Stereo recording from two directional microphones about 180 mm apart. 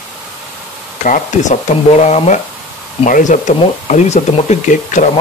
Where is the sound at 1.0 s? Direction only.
45° left (ahead or behind).